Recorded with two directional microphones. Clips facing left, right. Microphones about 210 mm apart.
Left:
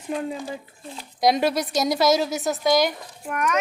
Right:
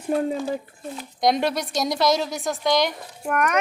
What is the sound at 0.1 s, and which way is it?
Speech, 40° right (ahead or behind).